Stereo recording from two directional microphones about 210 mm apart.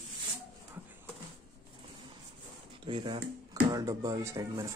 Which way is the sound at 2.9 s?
25° right (ahead or behind).